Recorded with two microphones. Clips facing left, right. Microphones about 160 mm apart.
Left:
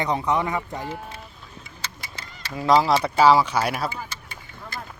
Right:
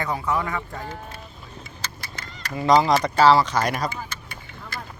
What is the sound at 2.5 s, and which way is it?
Speech, centre (ahead or behind).